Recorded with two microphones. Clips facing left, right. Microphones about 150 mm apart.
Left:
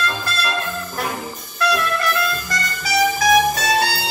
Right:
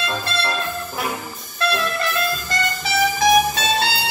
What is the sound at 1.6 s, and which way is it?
Music, 25° right (ahead or behind).